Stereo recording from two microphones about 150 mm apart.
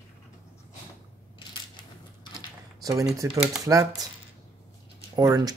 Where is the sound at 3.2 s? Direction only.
20° right (ahead or behind).